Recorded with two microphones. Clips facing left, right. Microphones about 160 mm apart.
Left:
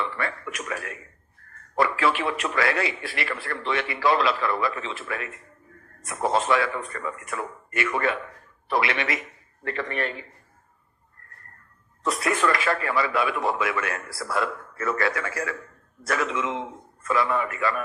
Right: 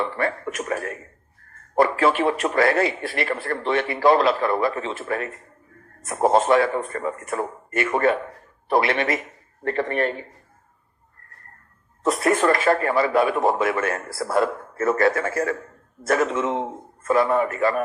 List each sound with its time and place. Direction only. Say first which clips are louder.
0.0 s a man's voice: right 5 dB; 40° right (ahead or behind)
12.1 s a man's voice: right 5 dB; 45° right (ahead or behind)